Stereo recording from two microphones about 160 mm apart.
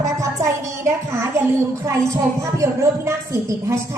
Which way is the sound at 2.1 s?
20° right (ahead or behind).